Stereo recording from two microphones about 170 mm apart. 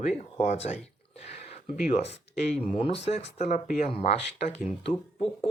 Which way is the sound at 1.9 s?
40° left (ahead or behind).